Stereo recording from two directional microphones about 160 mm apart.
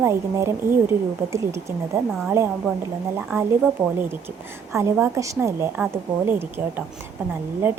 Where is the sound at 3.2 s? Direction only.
10° right (ahead or behind).